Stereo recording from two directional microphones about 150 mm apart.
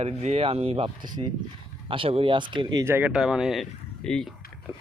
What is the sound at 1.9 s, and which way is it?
Speech, 35° right (ahead or behind).